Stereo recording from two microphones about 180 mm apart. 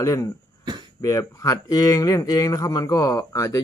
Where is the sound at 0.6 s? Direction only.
25° right (ahead or behind).